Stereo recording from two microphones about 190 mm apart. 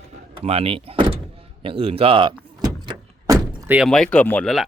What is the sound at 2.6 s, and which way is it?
Door, 20° right (ahead or behind).